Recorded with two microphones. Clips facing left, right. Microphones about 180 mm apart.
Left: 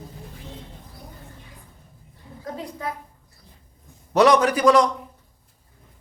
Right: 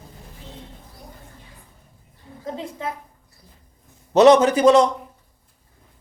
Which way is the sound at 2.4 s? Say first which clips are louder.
Right 2 dB; 25° right (ahead or behind).